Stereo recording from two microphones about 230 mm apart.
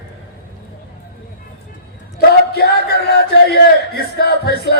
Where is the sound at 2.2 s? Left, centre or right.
Left.